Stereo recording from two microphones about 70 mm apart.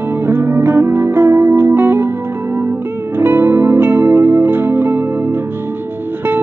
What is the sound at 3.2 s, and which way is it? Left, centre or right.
Music, right.